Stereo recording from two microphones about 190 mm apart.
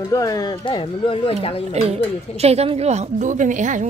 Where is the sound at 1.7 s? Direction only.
35° right (ahead or behind).